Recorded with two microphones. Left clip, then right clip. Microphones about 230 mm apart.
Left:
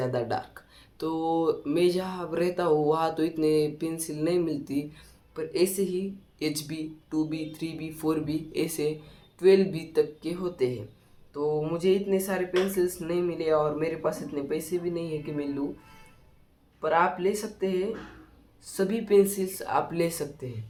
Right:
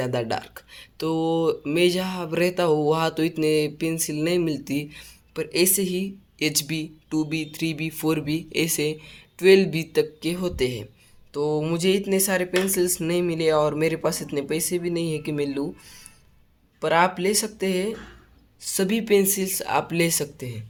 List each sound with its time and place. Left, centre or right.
0.0 s speech: right
16.8 s speech: right